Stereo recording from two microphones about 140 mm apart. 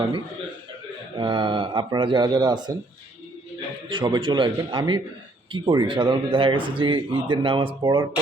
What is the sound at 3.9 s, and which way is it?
Speech, 35° right (ahead or behind).